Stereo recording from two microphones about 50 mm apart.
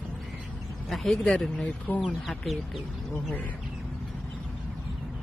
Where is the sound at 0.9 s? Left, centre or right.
Centre.